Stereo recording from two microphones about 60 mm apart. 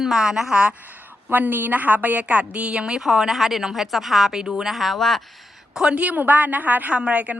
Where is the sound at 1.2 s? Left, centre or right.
Right; by 5.2 s centre.